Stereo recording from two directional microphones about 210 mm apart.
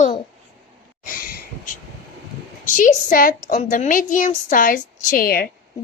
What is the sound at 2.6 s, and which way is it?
A woman's voice, 40° left (ahead or behind).